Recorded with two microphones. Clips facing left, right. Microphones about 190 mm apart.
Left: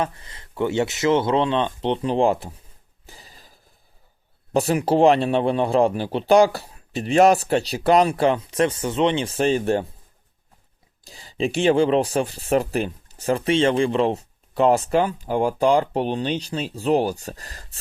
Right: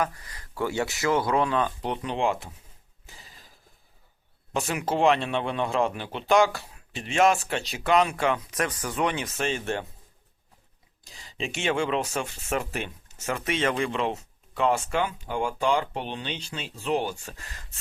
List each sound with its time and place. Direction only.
0.0 s speech: 25° left (ahead or behind)
3.1 s a sound: 35° left (ahead or behind)
4.5 s speech: 35° left (ahead or behind)
11.0 s speech: 35° left (ahead or behind)